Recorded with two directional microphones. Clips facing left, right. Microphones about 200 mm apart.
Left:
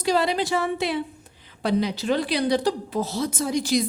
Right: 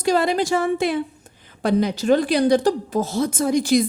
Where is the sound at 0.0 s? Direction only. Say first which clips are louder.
Right 3 dB; 50° right (ahead or behind).